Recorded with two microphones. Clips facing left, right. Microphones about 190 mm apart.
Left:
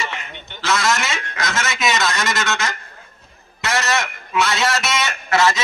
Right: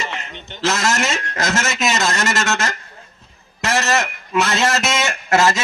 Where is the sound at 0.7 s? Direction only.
45° right (ahead or behind).